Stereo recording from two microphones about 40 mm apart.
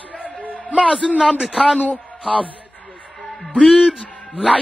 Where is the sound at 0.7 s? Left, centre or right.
Right.